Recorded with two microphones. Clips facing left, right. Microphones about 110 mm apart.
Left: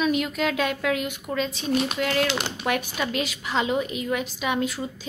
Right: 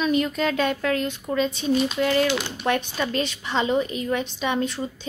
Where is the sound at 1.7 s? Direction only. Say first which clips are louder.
Right 1 dB; 70° left (ahead or behind).